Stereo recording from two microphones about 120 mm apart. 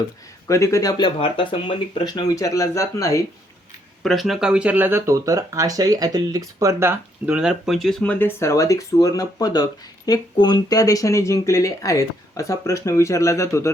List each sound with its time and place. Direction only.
0.4 s speech: 25° left (ahead or behind); by 1.8 s 45° left (ahead or behind)
2.0 s speech: 35° left (ahead or behind)
4.0 s speech: centre (ahead or behind); by 7.3 s 20° right (ahead or behind)
7.3 s speech: 5° right (ahead or behind); by 13.7 s 25° left (ahead or behind)